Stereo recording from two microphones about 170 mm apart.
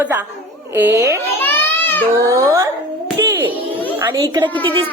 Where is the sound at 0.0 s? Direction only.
10° right (ahead or behind).